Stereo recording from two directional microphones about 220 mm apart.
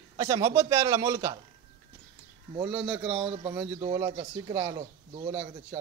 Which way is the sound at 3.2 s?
25° right (ahead or behind).